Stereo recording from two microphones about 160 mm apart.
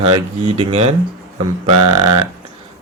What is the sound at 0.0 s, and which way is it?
Speech, 35° right (ahead or behind).